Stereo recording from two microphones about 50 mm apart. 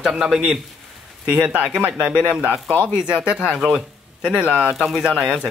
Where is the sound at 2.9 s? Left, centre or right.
Centre.